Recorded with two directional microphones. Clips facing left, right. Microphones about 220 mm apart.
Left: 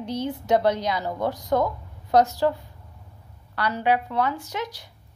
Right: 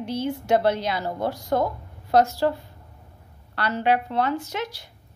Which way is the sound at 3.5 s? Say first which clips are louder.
Right 1 dB; 15° left (ahead or behind).